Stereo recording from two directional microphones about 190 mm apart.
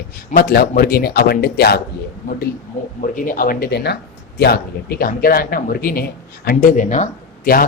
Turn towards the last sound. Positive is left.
turn(degrees=50)  # may be behind; listen again after turning